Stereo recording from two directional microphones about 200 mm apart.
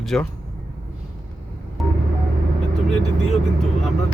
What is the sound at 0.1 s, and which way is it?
Speech, 5° left (ahead or behind).